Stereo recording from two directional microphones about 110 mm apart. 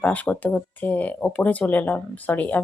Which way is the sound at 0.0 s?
15° left (ahead or behind).